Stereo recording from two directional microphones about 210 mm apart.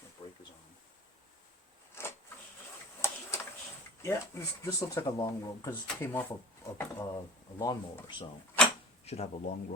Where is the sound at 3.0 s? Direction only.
15° left (ahead or behind).